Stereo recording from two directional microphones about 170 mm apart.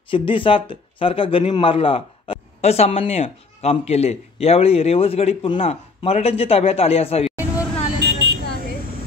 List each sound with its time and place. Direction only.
0.1 s a man's voice: 30° left (ahead or behind)
8.0 s vehicle: 90° right